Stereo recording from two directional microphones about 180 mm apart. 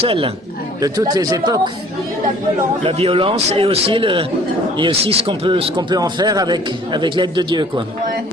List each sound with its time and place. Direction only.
0.0 s speech: 30° right (ahead or behind)
2.8 s speech: 30° right (ahead or behind)